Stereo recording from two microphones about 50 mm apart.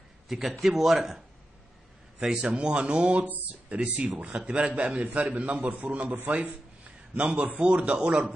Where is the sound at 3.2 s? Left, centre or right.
Right.